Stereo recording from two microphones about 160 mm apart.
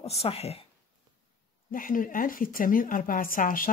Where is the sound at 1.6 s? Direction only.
60° left (ahead or behind).